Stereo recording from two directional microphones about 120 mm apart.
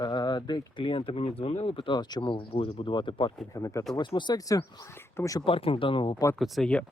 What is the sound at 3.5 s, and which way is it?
Speech, 25° left (ahead or behind).